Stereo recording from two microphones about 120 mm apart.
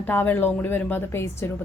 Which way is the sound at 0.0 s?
15° left (ahead or behind).